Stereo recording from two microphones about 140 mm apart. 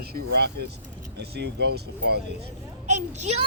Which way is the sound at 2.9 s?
55° right (ahead or behind).